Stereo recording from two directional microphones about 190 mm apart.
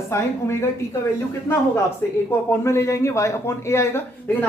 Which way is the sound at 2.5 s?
15° left (ahead or behind).